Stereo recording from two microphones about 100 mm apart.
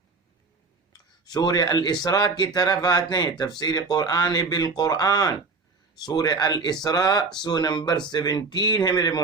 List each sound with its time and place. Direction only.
1.2 s speech: 40° left (ahead or behind)